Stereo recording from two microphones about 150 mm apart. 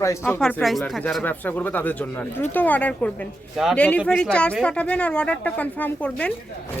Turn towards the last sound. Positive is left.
turn(degrees=10)  # may be behind; listen again after turning